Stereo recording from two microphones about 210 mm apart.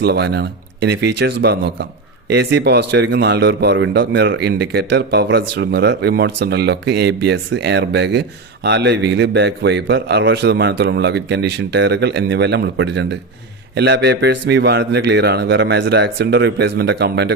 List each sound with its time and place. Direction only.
0.0 s a man's voice: 50° right (ahead or behind)